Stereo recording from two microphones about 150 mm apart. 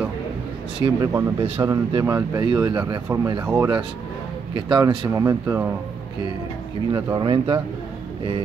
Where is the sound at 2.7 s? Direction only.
30° right (ahead or behind).